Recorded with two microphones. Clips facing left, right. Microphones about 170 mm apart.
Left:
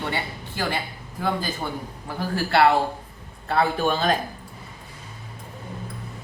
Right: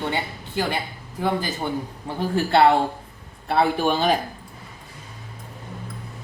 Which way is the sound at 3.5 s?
15° right (ahead or behind).